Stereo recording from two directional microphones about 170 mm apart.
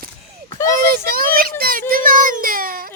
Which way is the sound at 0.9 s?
60° right (ahead or behind).